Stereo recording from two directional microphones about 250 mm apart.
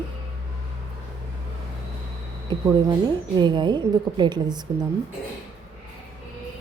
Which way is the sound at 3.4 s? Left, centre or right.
Centre.